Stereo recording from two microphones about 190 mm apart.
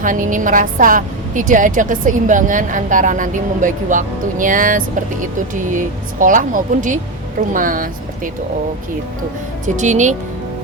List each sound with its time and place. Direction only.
0.0 s a woman's voice: 45° right (ahead or behind)
9.6 s speech: 40° right (ahead or behind)